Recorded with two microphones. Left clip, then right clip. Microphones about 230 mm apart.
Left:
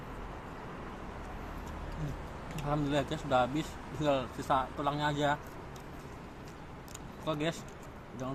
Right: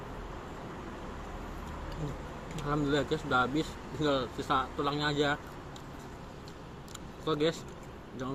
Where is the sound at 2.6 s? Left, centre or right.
Centre.